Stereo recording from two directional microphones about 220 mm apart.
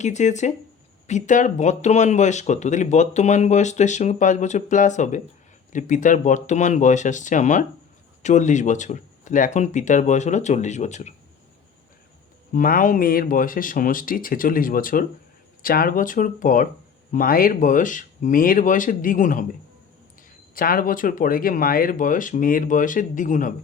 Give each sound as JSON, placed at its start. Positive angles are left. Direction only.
{"t": 0.0, "sound": "speech", "side_deg": 30}
{"t": 12.5, "sound": "speech", "side_deg": 40}
{"t": 20.6, "sound": "speech", "side_deg": 40}